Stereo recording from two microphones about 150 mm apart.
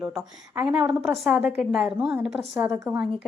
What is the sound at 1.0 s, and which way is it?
A woman's voice, centre (ahead or behind).